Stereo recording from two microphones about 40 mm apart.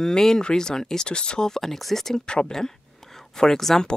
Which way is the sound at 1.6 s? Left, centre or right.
Centre.